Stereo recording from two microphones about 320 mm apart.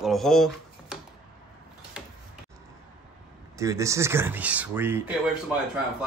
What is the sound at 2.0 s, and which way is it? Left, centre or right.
Tick-tock, centre.